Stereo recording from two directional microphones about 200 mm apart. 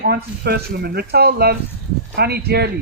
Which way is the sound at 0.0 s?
50° right (ahead or behind).